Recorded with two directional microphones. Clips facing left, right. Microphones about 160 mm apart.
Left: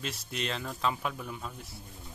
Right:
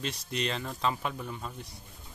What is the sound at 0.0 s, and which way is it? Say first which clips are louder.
Speech: right 3 dB; 5° left (ahead or behind).